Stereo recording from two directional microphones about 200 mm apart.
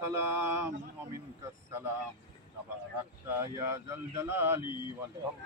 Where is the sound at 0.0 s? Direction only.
10° right (ahead or behind).